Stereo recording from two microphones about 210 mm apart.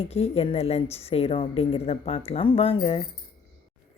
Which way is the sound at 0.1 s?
30° left (ahead or behind).